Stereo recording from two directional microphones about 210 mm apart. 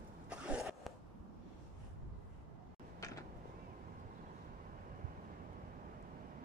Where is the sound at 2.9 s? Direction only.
15° left (ahead or behind).